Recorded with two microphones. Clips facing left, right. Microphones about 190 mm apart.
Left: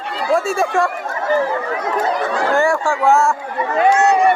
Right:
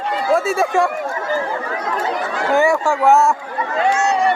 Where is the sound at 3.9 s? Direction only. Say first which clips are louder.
Left 4 dB; 55° left (ahead or behind).